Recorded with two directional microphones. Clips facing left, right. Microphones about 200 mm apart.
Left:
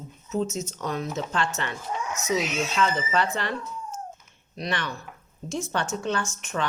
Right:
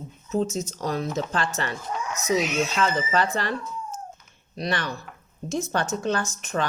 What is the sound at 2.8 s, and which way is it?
Speech, 40° right (ahead or behind).